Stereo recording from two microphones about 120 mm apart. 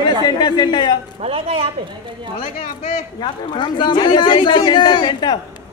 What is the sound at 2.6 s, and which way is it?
Speech, 90° left.